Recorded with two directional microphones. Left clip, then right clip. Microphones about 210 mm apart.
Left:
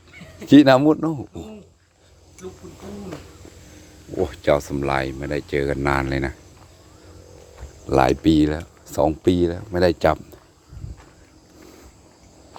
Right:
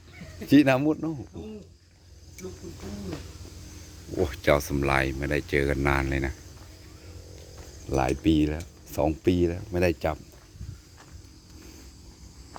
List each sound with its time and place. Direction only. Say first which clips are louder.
0.4 s a man's voice: left 8 dB; 20° left (ahead or behind)
4.2 s speech: left 4 dB; 10° left (ahead or behind)
7.9 s a man's voice: left 9 dB; 25° left (ahead or behind)
8.4 s speech: left 7 dB; 15° left (ahead or behind)